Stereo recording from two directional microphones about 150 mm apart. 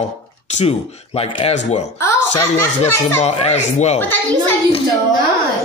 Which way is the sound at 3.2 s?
45° left (ahead or behind).